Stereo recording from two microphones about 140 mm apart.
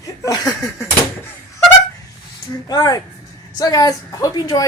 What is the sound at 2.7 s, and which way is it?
A woman's voice, 25° left (ahead or behind).